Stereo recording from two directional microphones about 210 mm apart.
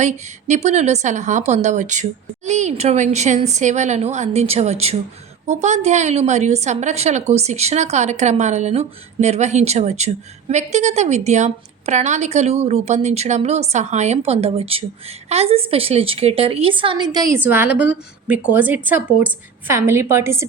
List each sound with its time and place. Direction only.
0.0 s a woman's voice: 35° right (ahead or behind); by 20.4 s 10° right (ahead or behind)